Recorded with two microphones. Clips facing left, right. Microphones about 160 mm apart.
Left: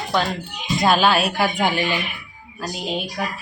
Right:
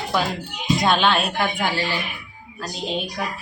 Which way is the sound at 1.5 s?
15° left (ahead or behind).